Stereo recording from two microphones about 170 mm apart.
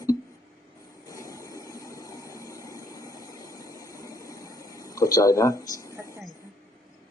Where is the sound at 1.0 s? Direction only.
20° left (ahead or behind).